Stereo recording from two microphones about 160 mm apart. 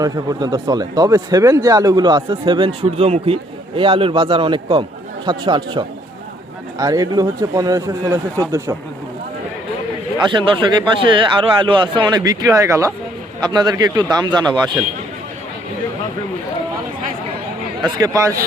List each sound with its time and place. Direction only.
0.0 s speech: 25° right (ahead or behind)
10.2 s speech: 30° right (ahead or behind)
17.8 s speech: 25° right (ahead or behind)